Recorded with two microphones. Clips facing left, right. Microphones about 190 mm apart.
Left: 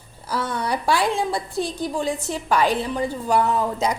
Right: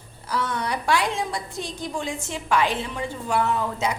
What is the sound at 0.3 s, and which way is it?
A woman's voice, 35° left (ahead or behind).